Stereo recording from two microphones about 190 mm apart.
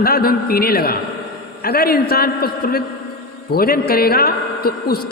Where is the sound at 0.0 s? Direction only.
50° left (ahead or behind).